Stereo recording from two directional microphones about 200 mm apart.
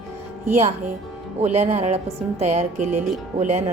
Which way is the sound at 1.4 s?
35° right (ahead or behind).